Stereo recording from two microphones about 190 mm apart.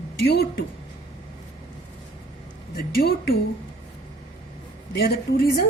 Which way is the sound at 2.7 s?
55° left (ahead or behind).